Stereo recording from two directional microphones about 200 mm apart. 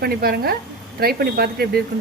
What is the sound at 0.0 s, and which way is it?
Speech, 50° right (ahead or behind).